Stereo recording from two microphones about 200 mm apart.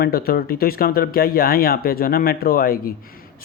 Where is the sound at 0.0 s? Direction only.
50° left (ahead or behind).